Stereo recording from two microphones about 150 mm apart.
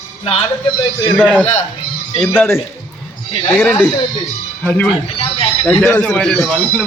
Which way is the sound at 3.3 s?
35° left (ahead or behind).